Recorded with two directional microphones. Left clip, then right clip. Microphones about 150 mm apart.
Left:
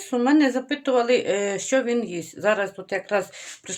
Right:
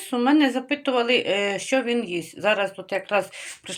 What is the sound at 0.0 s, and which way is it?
Speech, 25° left (ahead or behind).